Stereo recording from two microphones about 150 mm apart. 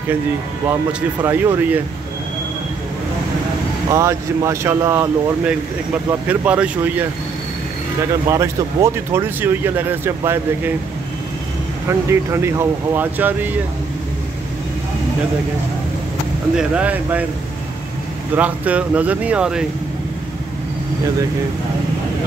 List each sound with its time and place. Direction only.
1.2 s speech: 15° right (ahead or behind)
3.9 s speech: 20° right (ahead or behind)
8.3 s speech: 20° right (ahead or behind)
11.9 s speech: 15° right (ahead or behind)
16.5 s speech: 10° right (ahead or behind)
18.3 s speech: 10° right (ahead or behind)